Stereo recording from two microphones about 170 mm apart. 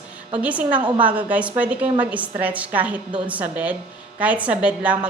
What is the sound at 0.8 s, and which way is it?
Speech, 30° right (ahead or behind).